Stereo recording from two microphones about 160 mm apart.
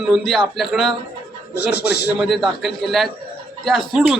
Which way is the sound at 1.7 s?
90° left.